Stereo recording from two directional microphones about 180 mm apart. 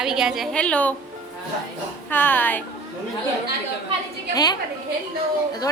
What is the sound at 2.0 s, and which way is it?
Speech, 10° left (ahead or behind).